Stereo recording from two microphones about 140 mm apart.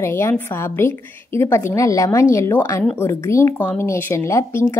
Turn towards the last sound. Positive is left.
turn(degrees=15)  # may be behind; listen again after turning